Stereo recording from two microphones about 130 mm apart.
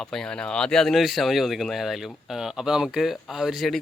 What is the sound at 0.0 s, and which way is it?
Speech, 5° left (ahead or behind).